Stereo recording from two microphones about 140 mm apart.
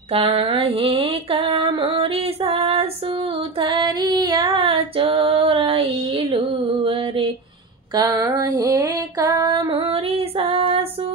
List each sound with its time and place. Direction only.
0.1 s female singing: 40° right (ahead or behind)
7.9 s female singing: 30° right (ahead or behind)